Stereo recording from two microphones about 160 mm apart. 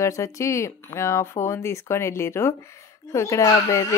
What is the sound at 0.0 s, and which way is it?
Speech, 20° left (ahead or behind).